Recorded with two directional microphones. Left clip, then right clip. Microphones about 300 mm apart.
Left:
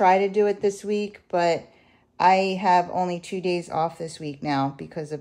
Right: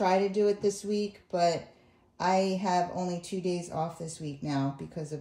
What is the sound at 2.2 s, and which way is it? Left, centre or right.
Speech, left.